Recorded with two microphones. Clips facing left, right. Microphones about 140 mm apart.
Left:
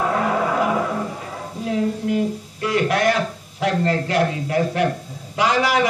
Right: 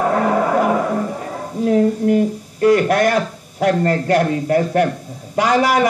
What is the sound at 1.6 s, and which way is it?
A man's voice, 45° right (ahead or behind).